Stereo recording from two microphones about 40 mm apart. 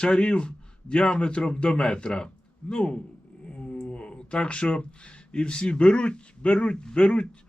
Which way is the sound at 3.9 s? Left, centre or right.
Left.